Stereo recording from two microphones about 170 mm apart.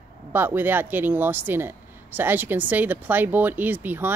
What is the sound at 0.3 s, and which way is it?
Speech, 10° right (ahead or behind).